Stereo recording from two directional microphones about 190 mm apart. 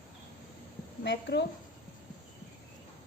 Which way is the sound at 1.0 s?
65° left (ahead or behind).